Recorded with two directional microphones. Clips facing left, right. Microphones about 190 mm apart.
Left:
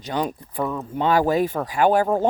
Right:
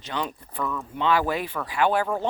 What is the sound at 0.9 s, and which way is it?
Speech, 45° left (ahead or behind).